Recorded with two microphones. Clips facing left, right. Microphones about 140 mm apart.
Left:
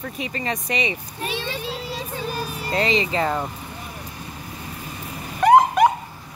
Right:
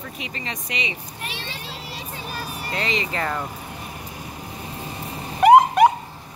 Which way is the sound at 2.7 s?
30° left (ahead or behind).